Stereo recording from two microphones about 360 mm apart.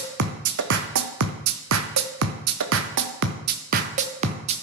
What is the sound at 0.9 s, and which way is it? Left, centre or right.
Music, right.